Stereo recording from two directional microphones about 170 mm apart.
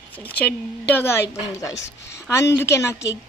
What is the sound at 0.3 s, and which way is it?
A woman's voice, 10° left (ahead or behind).